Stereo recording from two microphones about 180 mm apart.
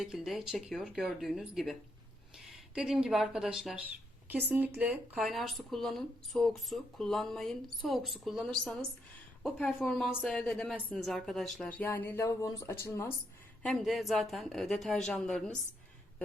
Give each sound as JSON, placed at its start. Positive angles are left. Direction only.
{"t": 0.0, "sound": "speech", "side_deg": 0}
{"t": 13.6, "sound": "speech", "side_deg": 0}